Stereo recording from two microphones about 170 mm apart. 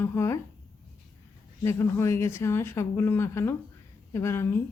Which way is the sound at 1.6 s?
15° left (ahead or behind).